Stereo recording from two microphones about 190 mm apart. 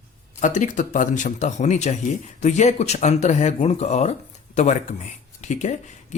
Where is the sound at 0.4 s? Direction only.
40° left (ahead or behind).